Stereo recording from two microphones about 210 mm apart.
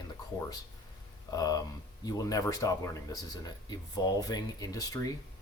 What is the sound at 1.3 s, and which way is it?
Speech, 15° left (ahead or behind).